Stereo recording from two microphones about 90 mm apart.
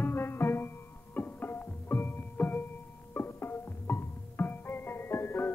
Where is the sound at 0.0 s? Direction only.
25° left (ahead or behind).